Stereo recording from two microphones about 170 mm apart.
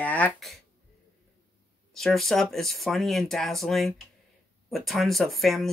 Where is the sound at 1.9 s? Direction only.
Centre (ahead or behind).